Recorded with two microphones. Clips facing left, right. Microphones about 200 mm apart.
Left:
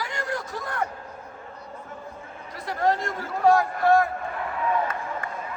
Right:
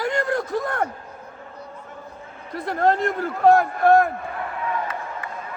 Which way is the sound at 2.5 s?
55° right (ahead or behind).